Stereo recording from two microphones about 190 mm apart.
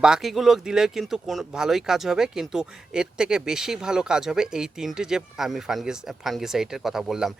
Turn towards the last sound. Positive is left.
turn(degrees=0)  # may be behind; listen again after turning